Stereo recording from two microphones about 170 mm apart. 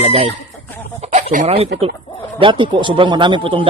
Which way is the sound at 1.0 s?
40° right (ahead or behind).